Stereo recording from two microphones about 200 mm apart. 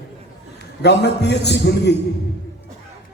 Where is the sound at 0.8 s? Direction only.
55° left (ahead or behind).